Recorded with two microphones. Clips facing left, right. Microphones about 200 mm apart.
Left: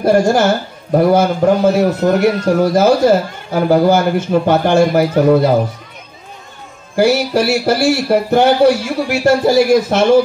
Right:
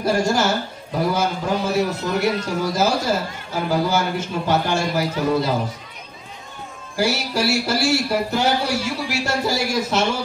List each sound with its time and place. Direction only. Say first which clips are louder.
0.0 s a man's voice: left 8 dB; 55° left (ahead or behind)
7.0 s a man's voice: left 9 dB; 55° left (ahead or behind)